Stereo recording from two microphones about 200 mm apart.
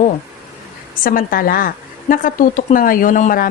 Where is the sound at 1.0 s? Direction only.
45° left (ahead or behind).